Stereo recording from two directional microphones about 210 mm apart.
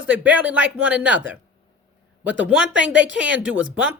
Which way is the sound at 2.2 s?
5° right (ahead or behind).